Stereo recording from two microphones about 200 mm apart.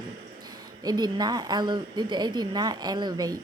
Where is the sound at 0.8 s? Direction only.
20° right (ahead or behind).